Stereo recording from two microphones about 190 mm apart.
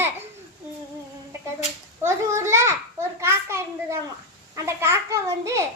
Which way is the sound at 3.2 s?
15° right (ahead or behind).